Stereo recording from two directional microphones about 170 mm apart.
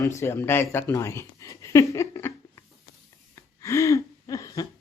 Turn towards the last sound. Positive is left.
turn(degrees=20)  # may be behind; listen again after turning